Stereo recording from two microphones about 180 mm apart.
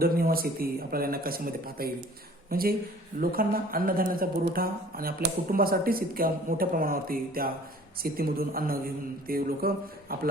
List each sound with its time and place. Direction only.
0.0 s a man's voice: 55° right (ahead or behind)